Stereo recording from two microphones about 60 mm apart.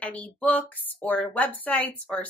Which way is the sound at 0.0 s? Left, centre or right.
Left.